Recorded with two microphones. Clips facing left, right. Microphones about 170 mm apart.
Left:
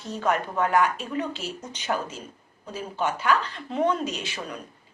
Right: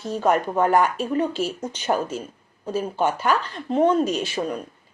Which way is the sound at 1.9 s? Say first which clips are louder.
Right 5 dB; 30° right (ahead or behind).